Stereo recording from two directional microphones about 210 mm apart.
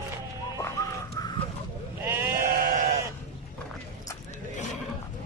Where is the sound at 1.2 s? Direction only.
15° left (ahead or behind).